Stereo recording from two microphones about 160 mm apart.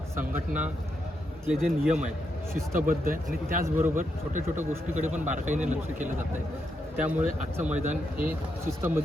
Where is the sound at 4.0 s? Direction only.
50° right (ahead or behind).